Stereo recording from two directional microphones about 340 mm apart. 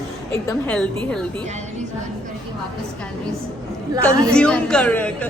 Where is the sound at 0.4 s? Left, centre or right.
Centre.